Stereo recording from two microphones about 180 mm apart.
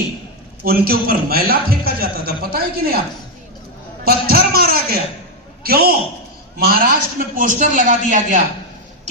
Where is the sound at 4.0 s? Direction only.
60° right (ahead or behind).